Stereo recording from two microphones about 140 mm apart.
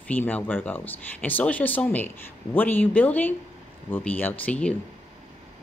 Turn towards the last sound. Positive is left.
turn(degrees=10)  # may be behind; listen again after turning